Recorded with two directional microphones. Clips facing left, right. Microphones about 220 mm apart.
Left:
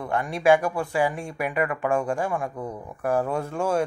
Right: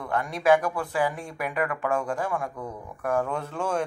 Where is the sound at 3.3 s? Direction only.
10° left (ahead or behind).